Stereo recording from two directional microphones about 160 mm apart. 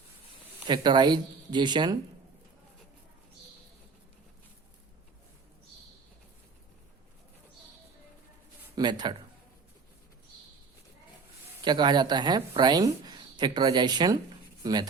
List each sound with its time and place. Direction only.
0.7 s speech: 25° right (ahead or behind)
8.7 s speech: 25° right (ahead or behind)
11.6 s speech: 25° right (ahead or behind)